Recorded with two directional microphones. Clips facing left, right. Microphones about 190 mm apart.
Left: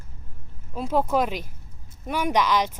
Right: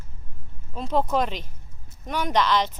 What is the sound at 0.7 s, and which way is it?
Speech, 10° left (ahead or behind).